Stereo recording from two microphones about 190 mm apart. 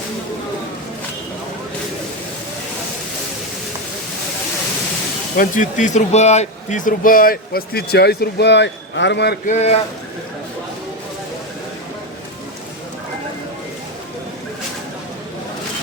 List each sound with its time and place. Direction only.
5.4 s speech: 40° left (ahead or behind); by 9.4 s 60° left (ahead or behind)
9.5 s speech: 35° left (ahead or behind)